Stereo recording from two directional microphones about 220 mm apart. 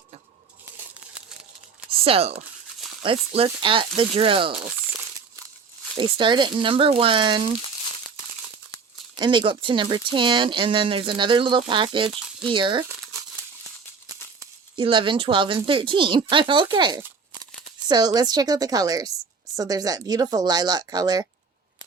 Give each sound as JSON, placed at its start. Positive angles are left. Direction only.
{"t": 1.9, "sound": "a sound", "side_deg": -25}
{"t": 3.0, "sound": "speech", "side_deg": -25}
{"t": 6.0, "sound": "speech", "side_deg": -20}
{"t": 9.1, "sound": "speech", "side_deg": -20}
{"t": 12.4, "sound": "crumpling", "side_deg": -20}
{"t": 14.8, "sound": "speech", "side_deg": -20}